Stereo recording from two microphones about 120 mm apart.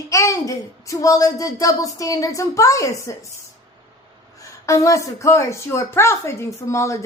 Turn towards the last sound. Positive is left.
turn(degrees=25)  # may be behind; listen again after turning